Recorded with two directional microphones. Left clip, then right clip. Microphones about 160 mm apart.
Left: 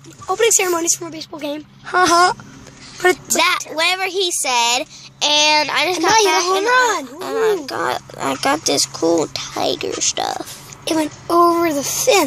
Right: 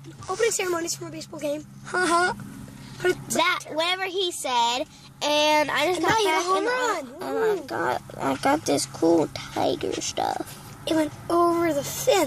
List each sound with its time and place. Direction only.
0.3 s speech: 20° left (ahead or behind)
3.3 s speech: 5° left (ahead or behind)
5.2 s speech: 10° right (ahead or behind)
6.6 s speech: 35° left (ahead or behind)
7.2 s speech: 5° left (ahead or behind)
10.9 s a child's voice: 40° left (ahead or behind)